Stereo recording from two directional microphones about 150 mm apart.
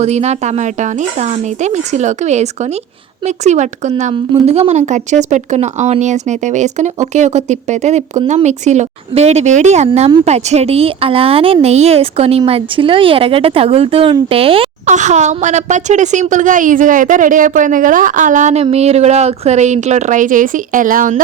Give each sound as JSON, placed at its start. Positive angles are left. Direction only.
{"t": 0.0, "sound": "speech", "side_deg": -45}
{"t": 4.1, "sound": "speech", "side_deg": -35}
{"t": 14.8, "sound": "speech", "side_deg": -50}
{"t": 18.6, "sound": "speech", "side_deg": -45}